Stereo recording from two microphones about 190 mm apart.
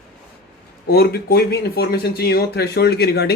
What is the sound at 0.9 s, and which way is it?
Speech, 55° left (ahead or behind).